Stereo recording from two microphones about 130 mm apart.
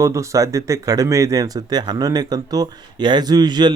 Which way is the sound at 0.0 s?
25° right (ahead or behind).